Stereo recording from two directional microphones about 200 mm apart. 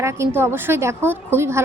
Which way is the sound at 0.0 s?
10° right (ahead or behind).